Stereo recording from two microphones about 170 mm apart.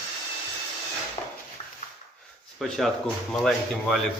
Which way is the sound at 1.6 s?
30° left (ahead or behind).